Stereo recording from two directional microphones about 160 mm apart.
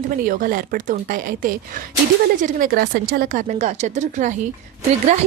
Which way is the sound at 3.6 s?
45° right (ahead or behind).